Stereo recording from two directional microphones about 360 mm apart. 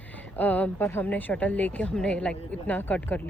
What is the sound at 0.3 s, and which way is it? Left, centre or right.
A woman's voice, centre.